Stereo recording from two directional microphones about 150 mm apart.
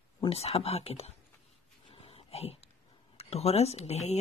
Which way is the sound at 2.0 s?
40° left (ahead or behind).